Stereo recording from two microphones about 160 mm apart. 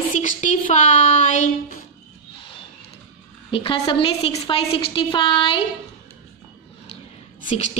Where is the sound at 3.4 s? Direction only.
35° left (ahead or behind).